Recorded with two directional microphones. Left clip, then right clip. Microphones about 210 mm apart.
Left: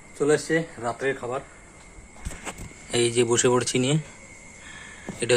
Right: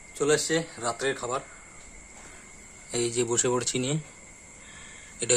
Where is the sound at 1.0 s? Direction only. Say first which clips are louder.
Left 2 dB; 15° right (ahead or behind).